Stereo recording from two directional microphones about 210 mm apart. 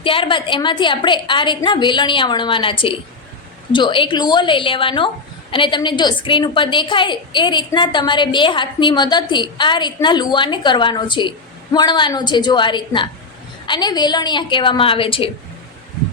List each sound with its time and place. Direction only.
0.0 s a woman's voice: 25° left (ahead or behind)